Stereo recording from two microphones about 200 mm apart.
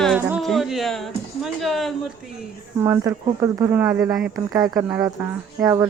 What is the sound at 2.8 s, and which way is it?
Speech, 10° right (ahead or behind).